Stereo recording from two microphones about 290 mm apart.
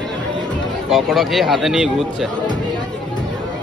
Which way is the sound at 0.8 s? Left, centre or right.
Centre.